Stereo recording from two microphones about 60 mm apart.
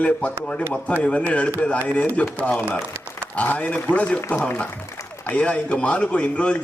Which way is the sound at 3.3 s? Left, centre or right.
Left.